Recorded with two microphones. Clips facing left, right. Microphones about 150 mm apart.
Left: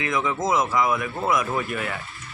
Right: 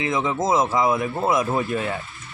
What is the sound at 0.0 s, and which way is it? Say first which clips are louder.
Speech: right 2 dB; 25° right (ahead or behind).